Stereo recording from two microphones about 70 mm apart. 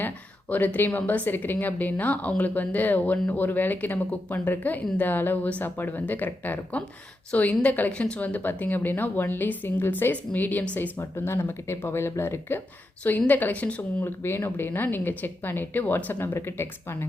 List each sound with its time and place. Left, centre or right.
0.5 s a woman's voice: left
11.3 s speech: left
13.1 s a woman's voice: left
14.0 s a woman's voice: left